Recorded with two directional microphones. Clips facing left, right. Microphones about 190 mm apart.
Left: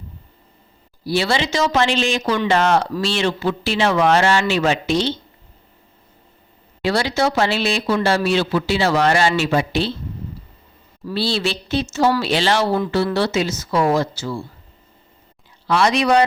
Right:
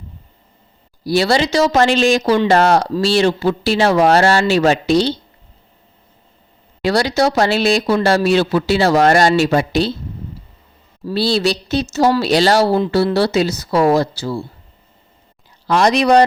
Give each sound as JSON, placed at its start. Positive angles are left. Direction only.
{"t": 1.0, "sound": "speech", "side_deg": -40}
{"t": 6.8, "sound": "speech", "side_deg": -40}
{"t": 11.0, "sound": "speech", "side_deg": -40}
{"t": 15.6, "sound": "speech", "side_deg": -40}